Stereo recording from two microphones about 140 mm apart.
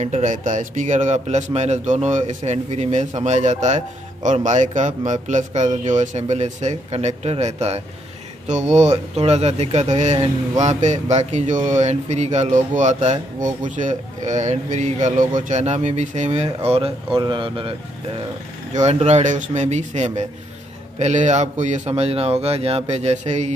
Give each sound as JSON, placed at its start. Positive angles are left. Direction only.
{"t": 0.0, "sound": "speech", "side_deg": -60}
{"t": 18.7, "sound": "speech", "side_deg": -55}